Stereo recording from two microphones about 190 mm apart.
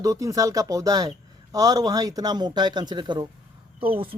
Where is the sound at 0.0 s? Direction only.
15° right (ahead or behind).